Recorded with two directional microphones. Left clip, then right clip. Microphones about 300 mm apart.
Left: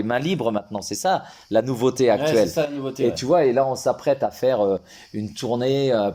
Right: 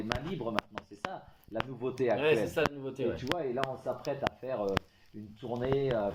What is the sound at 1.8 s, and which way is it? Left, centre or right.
Speech, left.